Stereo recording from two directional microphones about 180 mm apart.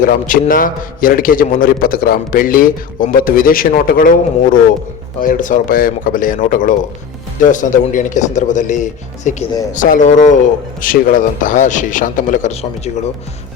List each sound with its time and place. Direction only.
0.0 s a man's voice: 50° left (ahead or behind)